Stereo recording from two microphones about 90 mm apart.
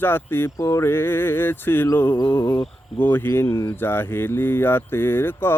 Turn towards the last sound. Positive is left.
turn(degrees=25)  # may be behind; listen again after turning